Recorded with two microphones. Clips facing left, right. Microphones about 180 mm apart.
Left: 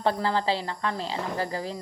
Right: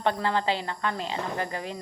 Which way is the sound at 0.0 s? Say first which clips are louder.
Left 1 dB; 30° left (ahead or behind).